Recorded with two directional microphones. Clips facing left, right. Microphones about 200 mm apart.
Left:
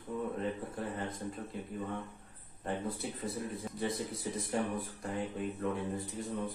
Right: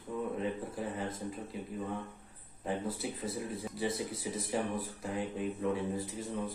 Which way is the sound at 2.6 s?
Centre (ahead or behind).